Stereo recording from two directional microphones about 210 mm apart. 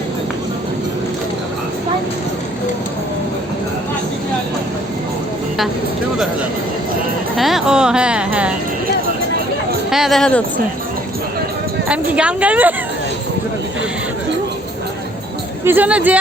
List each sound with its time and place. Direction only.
7.3 s speech: centre (ahead or behind)
9.9 s speech: centre (ahead or behind)
11.9 s a woman's voice: 5° right (ahead or behind)
15.6 s a woman's voice: 10° right (ahead or behind)